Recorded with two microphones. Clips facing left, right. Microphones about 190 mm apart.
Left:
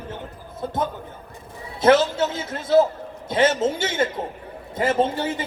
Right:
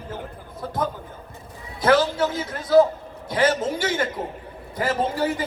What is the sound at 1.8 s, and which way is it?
A man's voice, 25° left (ahead or behind).